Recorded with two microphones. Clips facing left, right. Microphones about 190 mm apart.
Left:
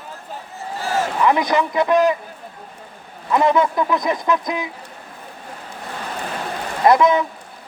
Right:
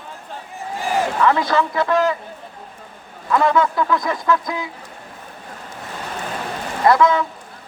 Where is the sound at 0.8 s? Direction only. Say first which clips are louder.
Right 1 dB; 15° right (ahead or behind).